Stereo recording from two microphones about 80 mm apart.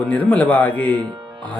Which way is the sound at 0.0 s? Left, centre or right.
Centre.